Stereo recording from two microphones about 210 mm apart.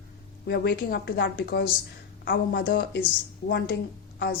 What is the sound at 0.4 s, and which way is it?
A woman's voice, 50° left (ahead or behind).